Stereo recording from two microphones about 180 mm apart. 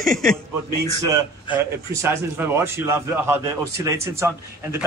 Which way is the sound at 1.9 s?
15° right (ahead or behind).